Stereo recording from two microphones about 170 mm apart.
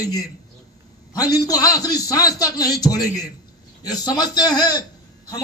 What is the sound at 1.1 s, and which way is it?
A man's voice, 20° left (ahead or behind).